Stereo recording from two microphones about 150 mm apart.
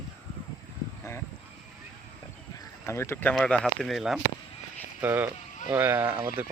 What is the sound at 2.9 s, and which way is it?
Speech, 15° left (ahead or behind).